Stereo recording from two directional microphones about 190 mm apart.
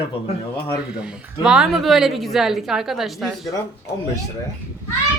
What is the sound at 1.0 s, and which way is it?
A woman's voice, 5° right (ahead or behind).